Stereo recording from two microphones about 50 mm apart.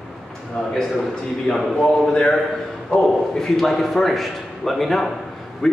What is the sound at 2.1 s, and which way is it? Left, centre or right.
A man's voice, centre.